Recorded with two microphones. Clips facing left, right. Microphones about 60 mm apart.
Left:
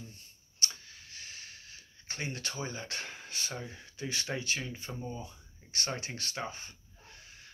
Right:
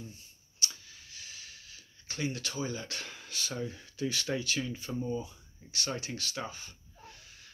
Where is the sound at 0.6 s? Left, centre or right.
Left.